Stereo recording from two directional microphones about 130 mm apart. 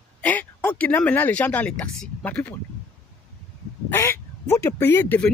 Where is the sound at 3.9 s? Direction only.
20° left (ahead or behind).